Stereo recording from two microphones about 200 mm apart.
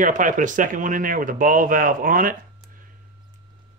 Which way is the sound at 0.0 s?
40° right (ahead or behind).